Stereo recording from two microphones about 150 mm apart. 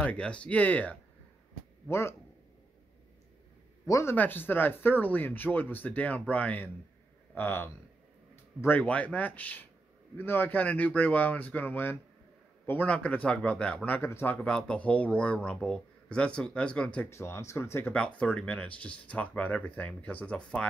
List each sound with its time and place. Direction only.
0.0 s speech: 10° left (ahead or behind)
3.8 s speech: 20° left (ahead or behind)
17.1 s speech: 20° left (ahead or behind)